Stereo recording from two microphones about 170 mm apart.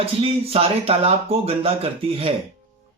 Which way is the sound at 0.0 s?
35° right (ahead or behind).